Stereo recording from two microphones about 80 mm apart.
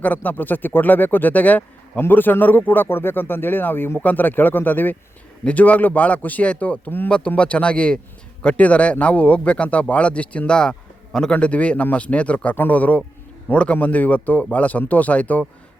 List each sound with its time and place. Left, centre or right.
0.0 s speech: left